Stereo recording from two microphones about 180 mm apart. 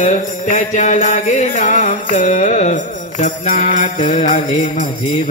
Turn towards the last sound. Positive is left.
turn(degrees=40)  # may be behind; listen again after turning